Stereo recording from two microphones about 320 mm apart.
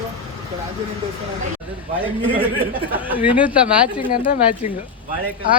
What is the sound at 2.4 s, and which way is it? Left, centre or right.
Speech, centre.